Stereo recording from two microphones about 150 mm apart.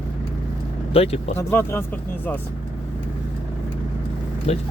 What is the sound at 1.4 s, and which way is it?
Speech, 15° left (ahead or behind).